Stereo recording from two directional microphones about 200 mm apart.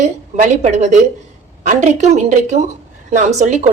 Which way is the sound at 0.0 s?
35° right (ahead or behind).